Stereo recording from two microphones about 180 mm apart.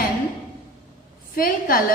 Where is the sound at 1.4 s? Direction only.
50° left (ahead or behind).